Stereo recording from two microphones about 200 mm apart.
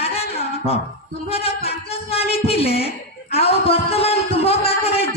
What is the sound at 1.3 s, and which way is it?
A man's voice, 30° left (ahead or behind).